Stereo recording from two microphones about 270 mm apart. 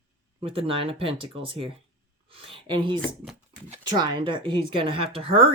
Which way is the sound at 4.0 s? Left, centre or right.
Centre.